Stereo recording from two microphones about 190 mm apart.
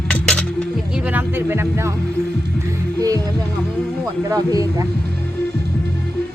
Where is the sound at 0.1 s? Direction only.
5° left (ahead or behind).